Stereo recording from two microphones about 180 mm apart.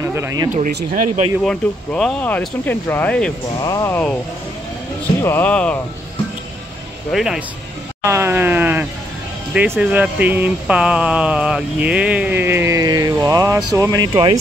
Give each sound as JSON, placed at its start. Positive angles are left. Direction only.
{"t": 0.0, "sound": "speech", "side_deg": -15}
{"t": 1.4, "sound": "speech", "side_deg": 5}
{"t": 3.6, "sound": "speech", "side_deg": 15}
{"t": 5.2, "sound": "speech", "side_deg": 10}
{"t": 7.1, "sound": "speech", "side_deg": 0}
{"t": 8.0, "sound": "wail", "side_deg": -15}
{"t": 9.5, "sound": "speech", "side_deg": -5}
{"t": 14.1, "sound": "speech", "side_deg": -30}